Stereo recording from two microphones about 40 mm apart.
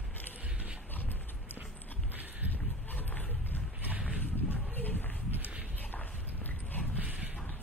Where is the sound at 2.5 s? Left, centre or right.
Left.